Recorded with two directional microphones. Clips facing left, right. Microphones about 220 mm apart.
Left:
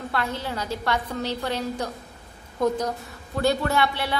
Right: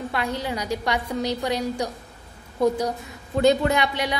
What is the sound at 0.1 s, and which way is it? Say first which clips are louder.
A woman's voice: even; 15° right (ahead or behind).